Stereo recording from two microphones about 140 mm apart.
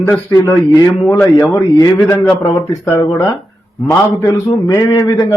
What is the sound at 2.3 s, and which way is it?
Speech, 35° left (ahead or behind).